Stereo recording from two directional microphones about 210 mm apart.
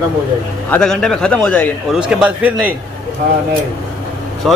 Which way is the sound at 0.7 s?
5° left (ahead or behind).